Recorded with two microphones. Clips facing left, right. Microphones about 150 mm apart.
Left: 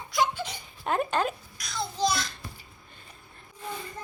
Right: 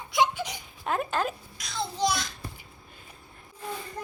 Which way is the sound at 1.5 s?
20° right (ahead or behind).